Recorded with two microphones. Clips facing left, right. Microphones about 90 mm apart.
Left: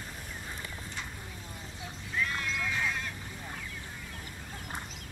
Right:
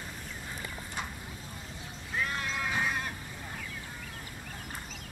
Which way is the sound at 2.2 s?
35° right (ahead or behind).